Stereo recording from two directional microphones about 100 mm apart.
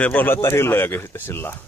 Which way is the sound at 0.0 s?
15° left (ahead or behind).